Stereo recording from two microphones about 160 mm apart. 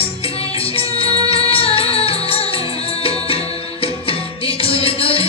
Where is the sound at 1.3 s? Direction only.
35° left (ahead or behind).